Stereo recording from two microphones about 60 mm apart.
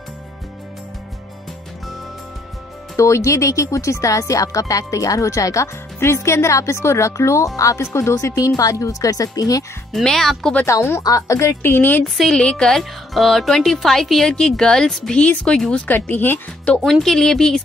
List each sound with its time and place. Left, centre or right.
3.0 s speech: left
5.9 s speech: left
7.8 s speech: left
9.9 s speech: centre
10.7 s speech: left
12.0 s speech: centre
12.4 s speech: centre
15.9 s speech: left
16.8 s speech: centre